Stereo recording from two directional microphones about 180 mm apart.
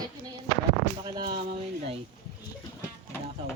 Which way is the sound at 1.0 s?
25° right (ahead or behind).